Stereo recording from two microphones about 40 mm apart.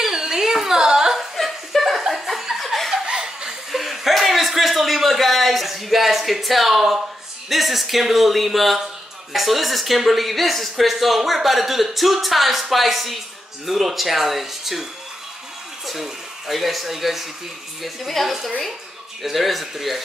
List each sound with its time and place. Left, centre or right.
0.0 s a sound: centre
1.3 s chuckle: centre
2.9 s chuckle: centre
3.7 s a sound: centre
7.4 s speech: centre
15.9 s speech: centre